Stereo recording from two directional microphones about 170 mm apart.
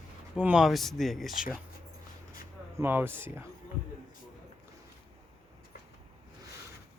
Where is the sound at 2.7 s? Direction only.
10° right (ahead or behind).